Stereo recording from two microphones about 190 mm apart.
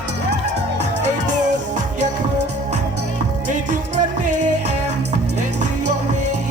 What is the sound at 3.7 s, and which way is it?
Music, 40° right (ahead or behind).